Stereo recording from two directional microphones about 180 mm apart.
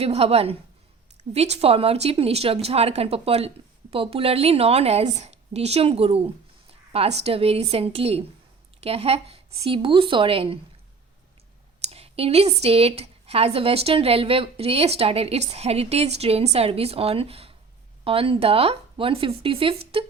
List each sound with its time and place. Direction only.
0.0 s a woman's voice: 35° right (ahead or behind)
11.8 s speech: 35° right (ahead or behind)